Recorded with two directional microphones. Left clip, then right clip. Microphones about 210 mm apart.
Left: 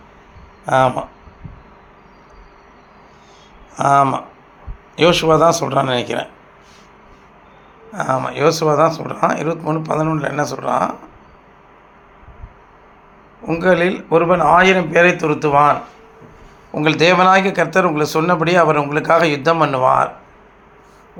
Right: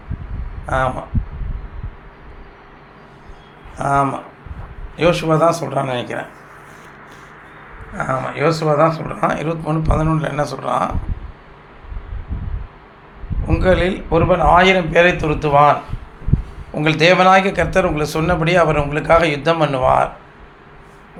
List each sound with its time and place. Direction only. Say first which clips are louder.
0.6 s speech: left 5 dB; 25° left (ahead or behind)
3.8 s speech: left 4 dB; 25° left (ahead or behind)
7.9 s a man's voice: left 2 dB; 20° left (ahead or behind)
13.4 s a man's voice: left 1 dB; 10° left (ahead or behind)
16.7 s a man's voice: even; 10° left (ahead or behind)